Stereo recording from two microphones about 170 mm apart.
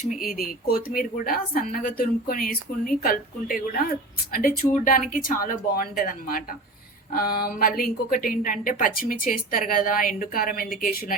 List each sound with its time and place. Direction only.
0.3 s a woman's voice: 60° left (ahead or behind)